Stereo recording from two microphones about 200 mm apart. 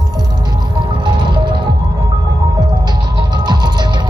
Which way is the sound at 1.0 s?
25° right (ahead or behind).